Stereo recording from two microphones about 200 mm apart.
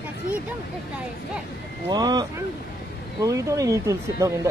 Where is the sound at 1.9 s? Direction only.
20° right (ahead or behind).